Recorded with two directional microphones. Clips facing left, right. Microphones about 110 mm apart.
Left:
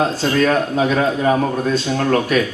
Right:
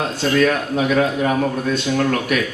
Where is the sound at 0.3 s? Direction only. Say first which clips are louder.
Left 1 dB; 35° left (ahead or behind).